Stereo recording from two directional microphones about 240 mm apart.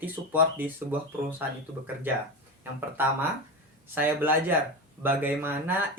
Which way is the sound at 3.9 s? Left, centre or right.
Centre.